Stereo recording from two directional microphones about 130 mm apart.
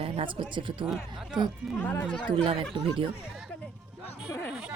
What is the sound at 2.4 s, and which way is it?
Speech, 40° right (ahead or behind).